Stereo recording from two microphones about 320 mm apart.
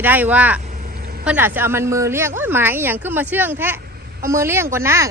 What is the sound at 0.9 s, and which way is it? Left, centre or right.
Vehicle, right.